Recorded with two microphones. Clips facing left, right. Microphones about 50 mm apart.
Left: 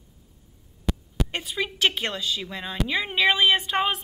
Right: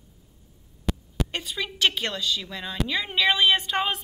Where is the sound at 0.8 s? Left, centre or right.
Centre.